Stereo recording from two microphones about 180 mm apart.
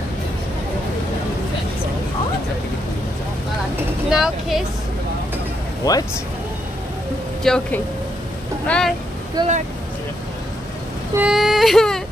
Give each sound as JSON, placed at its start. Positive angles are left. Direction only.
{"t": 4.1, "sound": "speech", "side_deg": 0}
{"t": 7.4, "sound": "speech", "side_deg": 5}
{"t": 9.4, "sound": "speech", "side_deg": -20}
{"t": 11.1, "sound": "a sound", "side_deg": -5}